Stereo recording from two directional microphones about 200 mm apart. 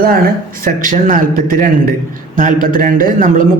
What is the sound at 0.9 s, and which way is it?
A man's voice, 40° right (ahead or behind).